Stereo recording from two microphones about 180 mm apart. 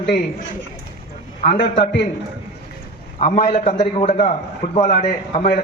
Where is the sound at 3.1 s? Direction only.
40° left (ahead or behind).